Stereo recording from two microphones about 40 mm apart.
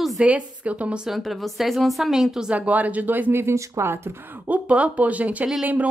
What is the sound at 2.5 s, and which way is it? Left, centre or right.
Speech, right.